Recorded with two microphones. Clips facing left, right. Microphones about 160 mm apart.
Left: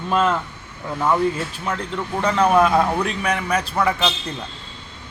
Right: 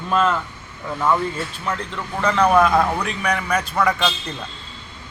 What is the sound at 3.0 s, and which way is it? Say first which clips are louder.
Speech: left 1 dB; 30° left (ahead or behind).